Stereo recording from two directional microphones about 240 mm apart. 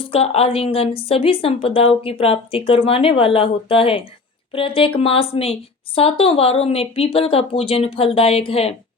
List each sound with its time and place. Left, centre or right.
0.0 s a woman's voice: left